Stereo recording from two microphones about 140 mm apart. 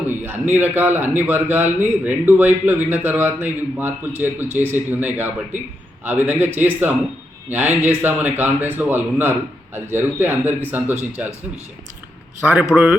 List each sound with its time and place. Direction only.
0.1 s a man's voice: 15° right (ahead or behind)
12.5 s speech: 5° right (ahead or behind)